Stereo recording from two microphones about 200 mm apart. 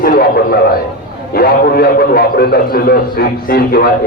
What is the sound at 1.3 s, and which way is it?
A man's voice, 50° left (ahead or behind).